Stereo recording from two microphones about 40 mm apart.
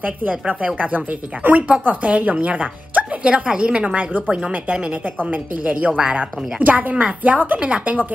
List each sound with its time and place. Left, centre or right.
0.0 s speech: right
5.2 s speech: right
5.9 s speech: right
6.1 s speech: right